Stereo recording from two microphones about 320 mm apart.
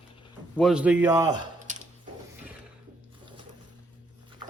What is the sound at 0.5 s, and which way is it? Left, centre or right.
Speech, centre.